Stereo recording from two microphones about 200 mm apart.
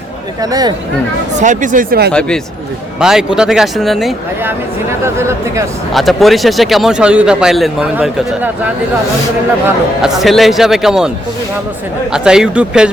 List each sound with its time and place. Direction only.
0.4 s speech: 20° right (ahead or behind)
1.4 s speech: 40° right (ahead or behind)
3.0 s a man's voice: 5° right (ahead or behind)
5.0 s speech: 15° right (ahead or behind)
5.9 s a man's voice: centre (ahead or behind)
10.0 s a man's voice: centre (ahead or behind)
12.1 s a man's voice: 5° right (ahead or behind)